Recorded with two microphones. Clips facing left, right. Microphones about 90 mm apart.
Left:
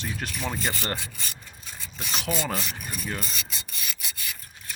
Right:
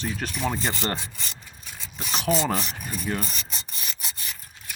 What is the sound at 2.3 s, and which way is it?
Rub, 25° right (ahead or behind).